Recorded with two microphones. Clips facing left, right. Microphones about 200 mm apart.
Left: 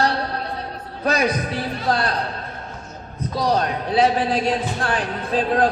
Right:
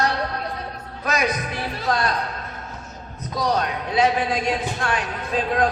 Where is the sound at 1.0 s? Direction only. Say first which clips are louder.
Left 3 dB; 30° left (ahead or behind).